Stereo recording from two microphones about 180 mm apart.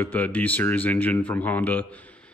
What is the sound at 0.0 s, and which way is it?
Speech, 10° left (ahead or behind).